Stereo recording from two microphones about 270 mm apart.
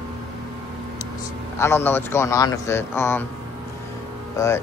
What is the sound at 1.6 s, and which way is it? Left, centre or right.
A man's voice, centre.